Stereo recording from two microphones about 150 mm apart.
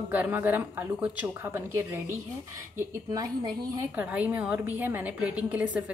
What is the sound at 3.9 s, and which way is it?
A woman's voice, 10° right (ahead or behind).